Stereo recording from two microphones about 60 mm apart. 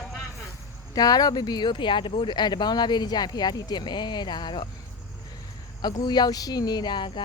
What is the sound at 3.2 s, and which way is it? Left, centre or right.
Speech, left.